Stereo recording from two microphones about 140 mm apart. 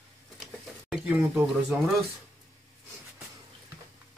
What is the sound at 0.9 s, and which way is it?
Speech, 10° right (ahead or behind).